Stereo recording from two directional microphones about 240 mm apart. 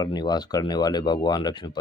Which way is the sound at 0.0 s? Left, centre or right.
Centre.